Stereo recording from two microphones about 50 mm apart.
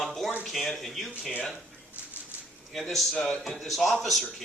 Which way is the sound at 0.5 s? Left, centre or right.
Centre.